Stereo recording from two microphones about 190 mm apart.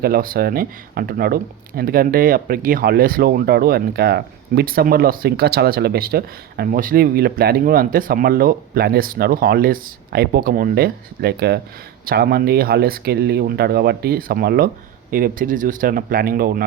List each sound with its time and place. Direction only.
0.0 s speech: 50° right (ahead or behind)